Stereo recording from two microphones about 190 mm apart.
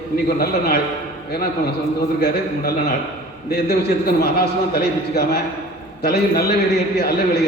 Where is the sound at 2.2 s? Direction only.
55° left (ahead or behind).